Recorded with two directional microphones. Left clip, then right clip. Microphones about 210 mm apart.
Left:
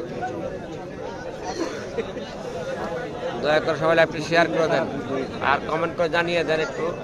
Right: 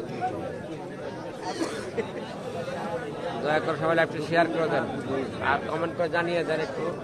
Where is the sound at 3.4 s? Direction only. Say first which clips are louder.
Left 5 dB; 10° left (ahead or behind).